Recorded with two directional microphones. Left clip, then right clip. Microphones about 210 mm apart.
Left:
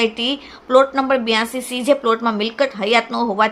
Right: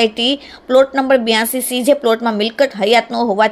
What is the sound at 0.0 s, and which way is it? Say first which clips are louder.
A woman's voice: right 4 dB; 15° right (ahead or behind).